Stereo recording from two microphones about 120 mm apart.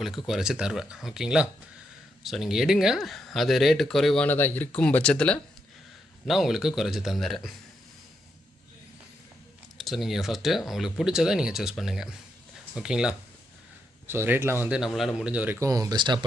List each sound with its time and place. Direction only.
0.3 s speech: 5° right (ahead or behind)
4.3 s speech: 15° left (ahead or behind)
6.2 s speech: centre (ahead or behind)
9.7 s speech: centre (ahead or behind)
14.1 s speech: 20° right (ahead or behind)
14.7 s speech: centre (ahead or behind)
15.6 s speech: 30° right (ahead or behind)